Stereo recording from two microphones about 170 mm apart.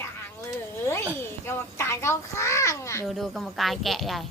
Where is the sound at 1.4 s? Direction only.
15° left (ahead or behind).